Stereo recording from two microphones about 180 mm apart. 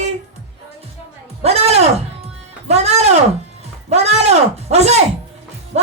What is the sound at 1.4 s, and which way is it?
A man's voice, 35° right (ahead or behind).